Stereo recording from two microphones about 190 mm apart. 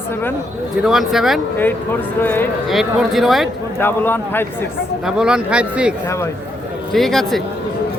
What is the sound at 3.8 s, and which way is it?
Speech, 10° left (ahead or behind).